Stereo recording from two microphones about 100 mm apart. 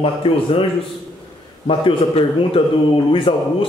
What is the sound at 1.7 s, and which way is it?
Speech, 65° left (ahead or behind).